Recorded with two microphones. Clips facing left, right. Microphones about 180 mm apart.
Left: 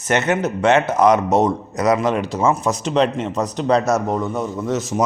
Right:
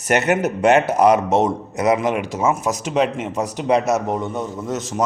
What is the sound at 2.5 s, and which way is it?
Speech, 10° right (ahead or behind).